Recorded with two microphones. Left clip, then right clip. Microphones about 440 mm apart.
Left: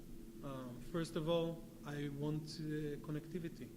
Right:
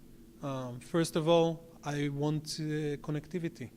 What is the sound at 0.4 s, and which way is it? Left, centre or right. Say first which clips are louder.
A man's voice: right 11 dB; right.